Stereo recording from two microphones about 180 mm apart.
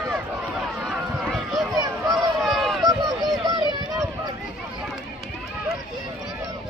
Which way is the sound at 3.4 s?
25° right (ahead or behind).